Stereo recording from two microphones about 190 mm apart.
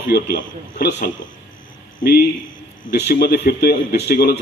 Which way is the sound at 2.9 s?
55° left (ahead or behind).